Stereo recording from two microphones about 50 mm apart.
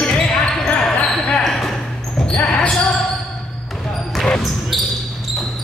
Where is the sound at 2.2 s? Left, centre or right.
Left.